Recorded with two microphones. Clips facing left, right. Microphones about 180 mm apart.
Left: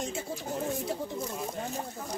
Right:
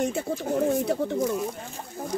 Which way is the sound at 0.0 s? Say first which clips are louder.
Right 8 dB; 65° right (ahead or behind).